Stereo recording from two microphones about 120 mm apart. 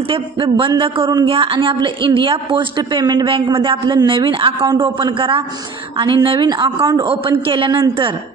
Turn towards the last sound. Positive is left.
turn(degrees=-45)  # may be behind; listen again after turning